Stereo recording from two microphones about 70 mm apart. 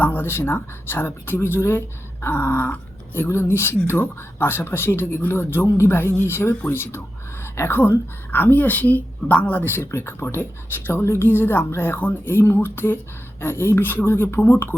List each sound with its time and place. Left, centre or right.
0.0 s a woman's voice: left